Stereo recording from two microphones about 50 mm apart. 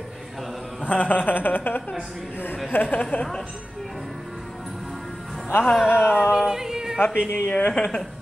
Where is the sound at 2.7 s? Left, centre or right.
Left.